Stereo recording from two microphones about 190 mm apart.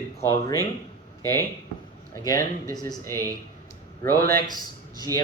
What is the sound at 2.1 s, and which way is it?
Speech, 15° left (ahead or behind).